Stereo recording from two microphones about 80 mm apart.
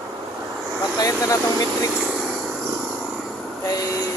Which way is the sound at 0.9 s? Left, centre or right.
Left.